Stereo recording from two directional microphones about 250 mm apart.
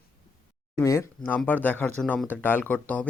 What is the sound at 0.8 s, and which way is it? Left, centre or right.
Speech, centre.